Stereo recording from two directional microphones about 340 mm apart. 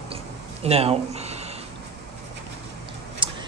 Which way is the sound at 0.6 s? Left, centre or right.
Centre.